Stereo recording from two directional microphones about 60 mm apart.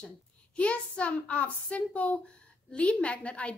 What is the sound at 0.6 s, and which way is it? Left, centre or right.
A woman's voice, left.